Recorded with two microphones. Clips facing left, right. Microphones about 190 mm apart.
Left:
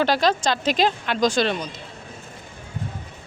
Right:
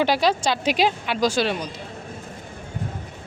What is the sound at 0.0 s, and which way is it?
Speech, 10° right (ahead or behind).